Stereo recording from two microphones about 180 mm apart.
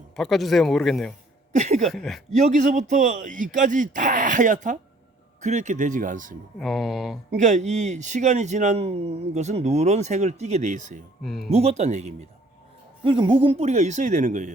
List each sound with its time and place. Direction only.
0.2 s speech: centre (ahead or behind)
1.5 s a sound: 40° right (ahead or behind)
1.9 s speech: centre (ahead or behind)
2.3 s a man's voice: 40° right (ahead or behind)
6.6 s speech: centre (ahead or behind)
7.3 s speech: 40° right (ahead or behind)
11.2 s speech: centre (ahead or behind)
11.5 s speech: 35° right (ahead or behind)
13.1 s speech: 25° right (ahead or behind); by 14.5 s 40° right (ahead or behind)